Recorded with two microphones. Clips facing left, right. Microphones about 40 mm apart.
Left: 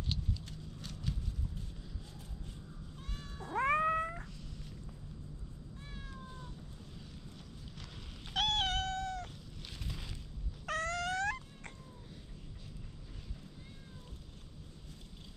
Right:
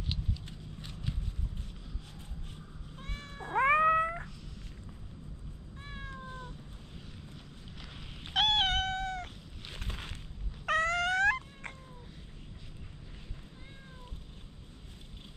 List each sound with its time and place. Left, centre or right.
0.0 s a sound: right
3.0 s cat: right
5.9 s cat: right
8.3 s cat: right